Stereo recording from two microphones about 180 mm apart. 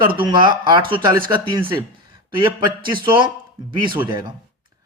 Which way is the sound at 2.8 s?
25° right (ahead or behind).